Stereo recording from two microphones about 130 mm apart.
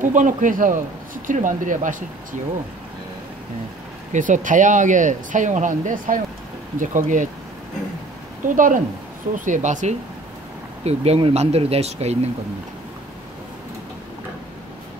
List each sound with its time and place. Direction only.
0.0 s speech: 75° right (ahead or behind)
4.1 s speech: 80° right
8.5 s speech: 90° right
9.4 s speech: 70° right (ahead or behind)
10.8 s speech: 55° right (ahead or behind)